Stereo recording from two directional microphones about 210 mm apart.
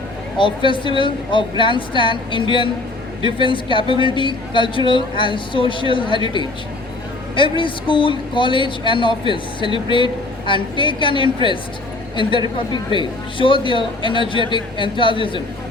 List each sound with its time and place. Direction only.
0.3 s a woman's voice: 25° left (ahead or behind)